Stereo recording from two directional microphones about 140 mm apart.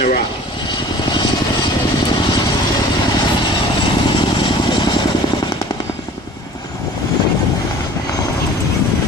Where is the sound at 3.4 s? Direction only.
35° left (ahead or behind).